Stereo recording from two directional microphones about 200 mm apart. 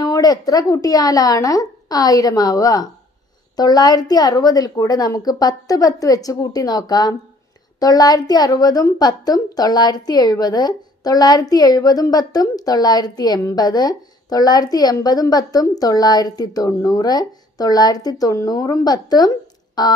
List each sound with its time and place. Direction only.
0.0 s a woman's voice: 20° left (ahead or behind)